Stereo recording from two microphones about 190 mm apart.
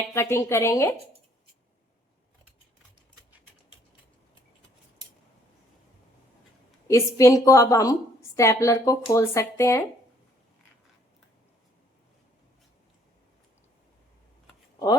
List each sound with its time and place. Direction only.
0.1 s speech: 15° left (ahead or behind)
6.8 s speech: 15° left (ahead or behind)